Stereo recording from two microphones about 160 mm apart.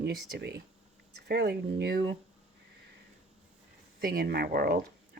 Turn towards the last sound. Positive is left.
turn(degrees=-75)  # may be behind; listen again after turning